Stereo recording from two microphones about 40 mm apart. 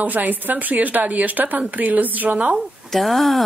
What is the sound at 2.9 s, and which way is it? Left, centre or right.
Speech, centre.